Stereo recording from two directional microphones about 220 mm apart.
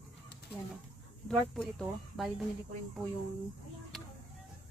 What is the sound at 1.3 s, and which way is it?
Speech, 5° left (ahead or behind).